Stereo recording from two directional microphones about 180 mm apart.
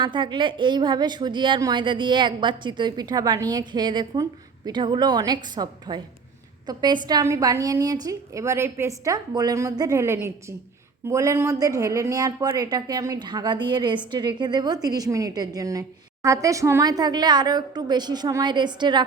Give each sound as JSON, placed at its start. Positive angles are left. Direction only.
{"t": 0.0, "sound": "a woman's voice", "side_deg": -25}